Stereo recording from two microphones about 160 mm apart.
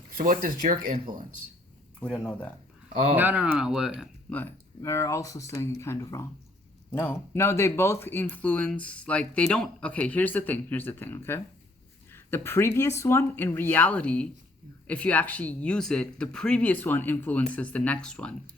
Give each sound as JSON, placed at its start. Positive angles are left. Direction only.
{"t": 0.2, "sound": "speech", "side_deg": -60}
{"t": 2.0, "sound": "speech", "side_deg": 10}
{"t": 3.2, "sound": "speech", "side_deg": -10}
{"t": 4.3, "sound": "speech", "side_deg": 10}